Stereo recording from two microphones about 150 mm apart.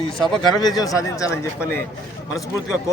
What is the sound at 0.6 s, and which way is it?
Speech, 25° left (ahead or behind).